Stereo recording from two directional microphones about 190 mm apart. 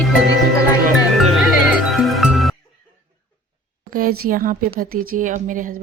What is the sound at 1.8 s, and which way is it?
Music, centre (ahead or behind).